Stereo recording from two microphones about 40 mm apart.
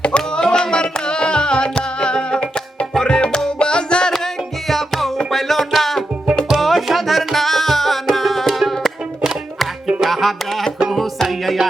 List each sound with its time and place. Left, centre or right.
0.0 s music: left
4.7 s music: centre
10.0 s music: centre